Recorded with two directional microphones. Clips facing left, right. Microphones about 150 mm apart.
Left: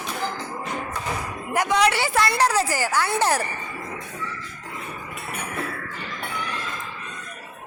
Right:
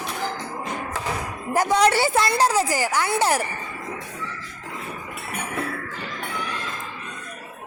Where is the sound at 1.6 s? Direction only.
35° right (ahead or behind).